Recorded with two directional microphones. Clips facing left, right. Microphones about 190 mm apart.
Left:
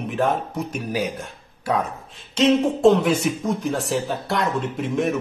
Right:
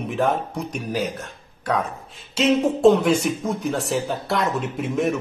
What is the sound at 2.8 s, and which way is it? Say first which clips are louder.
Speech: right 1 dB; centre (ahead or behind).